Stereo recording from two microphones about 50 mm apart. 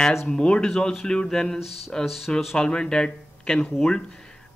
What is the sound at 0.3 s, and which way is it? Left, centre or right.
Speech, centre.